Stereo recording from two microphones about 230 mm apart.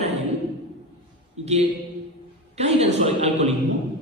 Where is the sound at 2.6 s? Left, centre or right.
Right.